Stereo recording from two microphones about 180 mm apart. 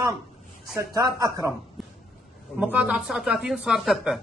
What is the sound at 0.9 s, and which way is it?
Speech, 20° right (ahead or behind).